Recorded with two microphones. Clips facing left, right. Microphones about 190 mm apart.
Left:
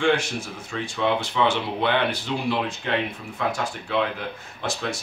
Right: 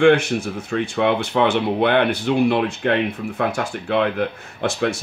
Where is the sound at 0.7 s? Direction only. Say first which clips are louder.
Right 5 dB; 55° right (ahead or behind).